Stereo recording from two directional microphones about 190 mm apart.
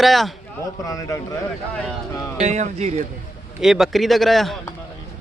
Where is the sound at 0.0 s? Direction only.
Centre (ahead or behind).